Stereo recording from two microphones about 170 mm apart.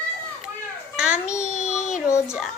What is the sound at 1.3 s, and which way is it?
Speech, 45° left (ahead or behind).